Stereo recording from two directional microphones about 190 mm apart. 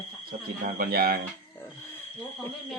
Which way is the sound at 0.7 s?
50° right (ahead or behind).